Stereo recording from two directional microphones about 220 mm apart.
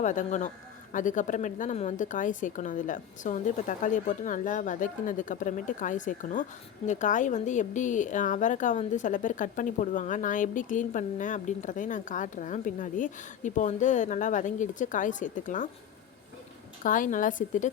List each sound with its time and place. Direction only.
0.0 s a woman's voice: 35° left (ahead or behind)
16.8 s a woman's voice: 40° left (ahead or behind)